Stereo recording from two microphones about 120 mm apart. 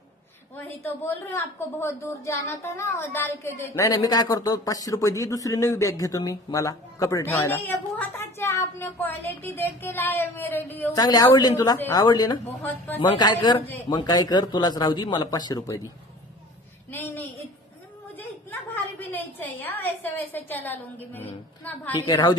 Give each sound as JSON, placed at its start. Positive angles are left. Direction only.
{"t": 0.7, "sound": "speech", "side_deg": 15}
{"t": 3.9, "sound": "speech", "side_deg": 35}
{"t": 7.4, "sound": "speech", "side_deg": 15}
{"t": 10.9, "sound": "speech", "side_deg": 35}
{"t": 12.4, "sound": "speech", "side_deg": 15}
{"t": 13.0, "sound": "speech", "side_deg": 40}
{"t": 16.9, "sound": "a sound", "side_deg": 15}
{"t": 18.9, "sound": "a woman's voice", "side_deg": 15}
{"t": 22.0, "sound": "speech", "side_deg": 40}